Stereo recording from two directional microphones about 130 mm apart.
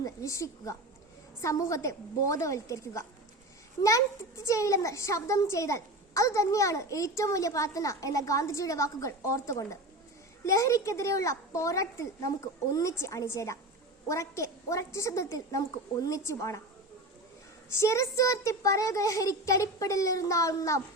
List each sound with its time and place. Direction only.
0.0 s a woman's voice: 25° left (ahead or behind)
4.4 s a woman's voice: 25° left (ahead or behind)
17.7 s a woman's voice: 20° left (ahead or behind)